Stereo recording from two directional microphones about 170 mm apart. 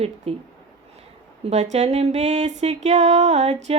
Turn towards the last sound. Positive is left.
turn(degrees=-40)  # may be behind; listen again after turning